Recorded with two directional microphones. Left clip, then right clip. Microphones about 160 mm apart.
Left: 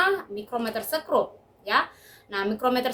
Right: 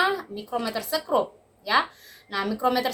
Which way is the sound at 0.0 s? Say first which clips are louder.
Left 1 dB; 10° left (ahead or behind).